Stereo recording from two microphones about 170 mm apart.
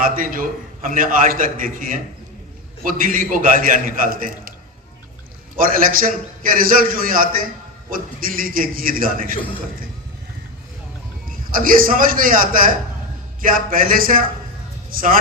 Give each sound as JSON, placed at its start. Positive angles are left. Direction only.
{"t": 0.0, "sound": "a man's voice", "side_deg": -55}
{"t": 5.5, "sound": "a man's voice", "side_deg": -55}
{"t": 11.5, "sound": "a man's voice", "side_deg": -55}